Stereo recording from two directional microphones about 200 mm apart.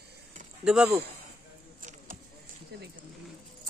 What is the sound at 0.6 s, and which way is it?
Speech, 5° right (ahead or behind).